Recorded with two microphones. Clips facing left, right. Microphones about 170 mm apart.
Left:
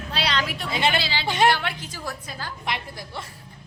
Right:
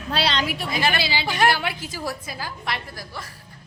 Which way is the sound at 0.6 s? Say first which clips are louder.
Left 2 dB; 25° left (ahead or behind).